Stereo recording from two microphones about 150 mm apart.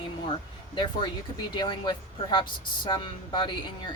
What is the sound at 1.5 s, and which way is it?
Speech, 30° left (ahead or behind).